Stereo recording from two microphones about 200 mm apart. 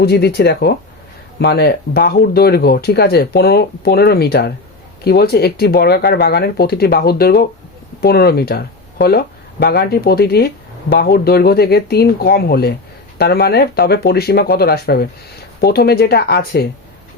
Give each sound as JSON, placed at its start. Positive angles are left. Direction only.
{"t": 0.0, "sound": "speech", "side_deg": 55}